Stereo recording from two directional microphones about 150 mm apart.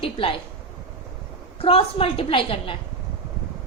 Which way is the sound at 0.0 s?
40° left (ahead or behind).